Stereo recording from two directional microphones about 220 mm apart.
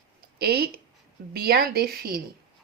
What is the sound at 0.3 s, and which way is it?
Speech, 45° right (ahead or behind).